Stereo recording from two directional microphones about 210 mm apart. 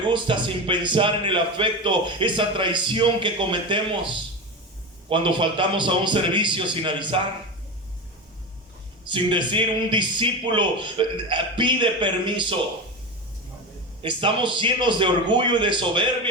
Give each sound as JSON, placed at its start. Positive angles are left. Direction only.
{"t": 0.1, "sound": "a man's voice", "side_deg": -25}
{"t": 9.0, "sound": "a man's voice", "side_deg": -20}
{"t": 14.0, "sound": "a man's voice", "side_deg": -25}